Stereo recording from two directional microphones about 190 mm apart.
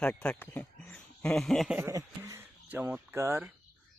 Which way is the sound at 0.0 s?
5° left (ahead or behind).